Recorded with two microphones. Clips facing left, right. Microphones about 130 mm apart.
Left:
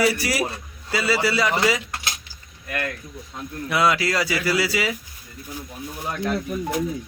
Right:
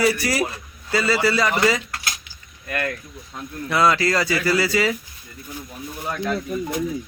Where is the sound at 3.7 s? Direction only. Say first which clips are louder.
Right 2 dB; 5° left (ahead or behind).